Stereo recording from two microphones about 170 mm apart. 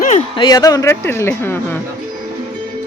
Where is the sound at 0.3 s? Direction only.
25° left (ahead or behind).